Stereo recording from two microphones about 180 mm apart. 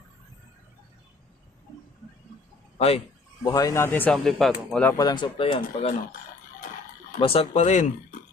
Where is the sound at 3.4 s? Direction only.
20° left (ahead or behind); by 4.8 s centre (ahead or behind).